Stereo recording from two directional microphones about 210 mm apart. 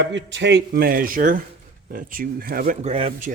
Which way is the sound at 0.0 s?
60° right (ahead or behind).